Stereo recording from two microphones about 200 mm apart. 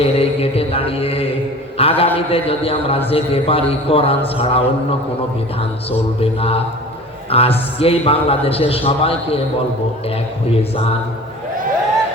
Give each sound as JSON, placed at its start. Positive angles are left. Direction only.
{"t": 0.0, "sound": "a man's voice", "side_deg": 30}
{"t": 7.3, "sound": "a man's voice", "side_deg": 30}